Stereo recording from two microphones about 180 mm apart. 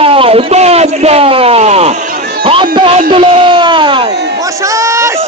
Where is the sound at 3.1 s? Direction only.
30° right (ahead or behind).